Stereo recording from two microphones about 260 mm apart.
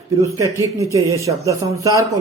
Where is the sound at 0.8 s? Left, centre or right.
Centre.